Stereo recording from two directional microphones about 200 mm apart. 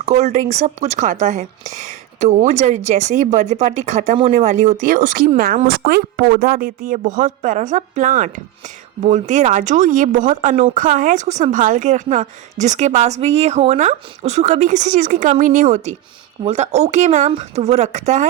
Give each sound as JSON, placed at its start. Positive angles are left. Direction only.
{"t": 0.0, "sound": "a woman's voice", "side_deg": -35}